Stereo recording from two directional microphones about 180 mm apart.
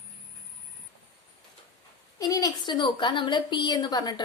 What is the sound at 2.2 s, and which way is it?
A woman's voice, 20° left (ahead or behind).